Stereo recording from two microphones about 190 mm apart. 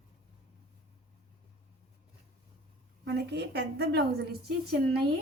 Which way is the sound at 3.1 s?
65° right (ahead or behind).